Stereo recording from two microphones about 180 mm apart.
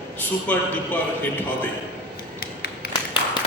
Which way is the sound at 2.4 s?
55° left (ahead or behind).